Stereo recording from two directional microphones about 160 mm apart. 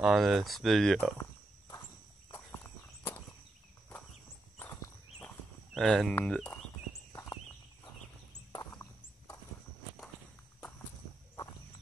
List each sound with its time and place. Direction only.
0.0 s speech: centre (ahead or behind)
2.3 s walk: 10° left (ahead or behind)
4.6 s walk: 15° left (ahead or behind)
5.8 s speech: centre (ahead or behind)
7.1 s horse: 20° left (ahead or behind)